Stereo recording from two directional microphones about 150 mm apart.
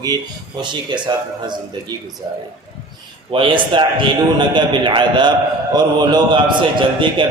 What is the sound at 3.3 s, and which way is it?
A man's voice, 35° right (ahead or behind).